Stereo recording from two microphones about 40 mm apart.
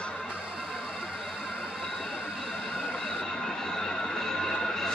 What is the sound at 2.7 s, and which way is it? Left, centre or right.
Train, centre.